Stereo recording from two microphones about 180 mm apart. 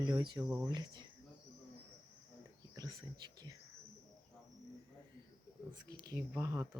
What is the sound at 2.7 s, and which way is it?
Speech, 20° right (ahead or behind).